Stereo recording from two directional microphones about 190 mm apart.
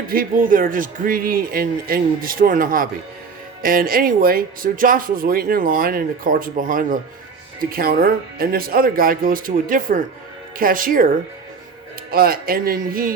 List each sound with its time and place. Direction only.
0.1 s speech: 50° right (ahead or behind)
12.1 s speech: 50° right (ahead or behind)